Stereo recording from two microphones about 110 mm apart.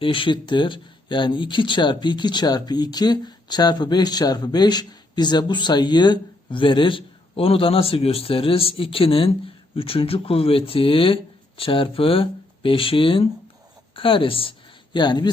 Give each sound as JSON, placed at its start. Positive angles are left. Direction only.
{"t": 0.0, "sound": "speech", "side_deg": 50}
{"t": 14.9, "sound": "speech", "side_deg": 40}